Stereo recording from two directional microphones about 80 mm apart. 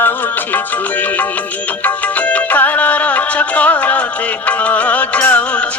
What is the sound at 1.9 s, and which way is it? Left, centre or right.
Music, centre.